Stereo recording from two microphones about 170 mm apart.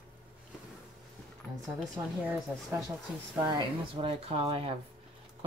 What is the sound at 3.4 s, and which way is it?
Speech, 30° right (ahead or behind).